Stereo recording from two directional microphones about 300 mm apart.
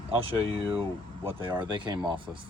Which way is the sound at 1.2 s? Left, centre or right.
Centre.